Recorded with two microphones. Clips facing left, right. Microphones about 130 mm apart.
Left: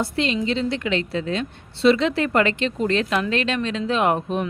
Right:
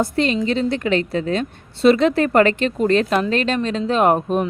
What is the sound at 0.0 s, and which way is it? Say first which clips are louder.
A woman's voice: right 4 dB; 45° right (ahead or behind).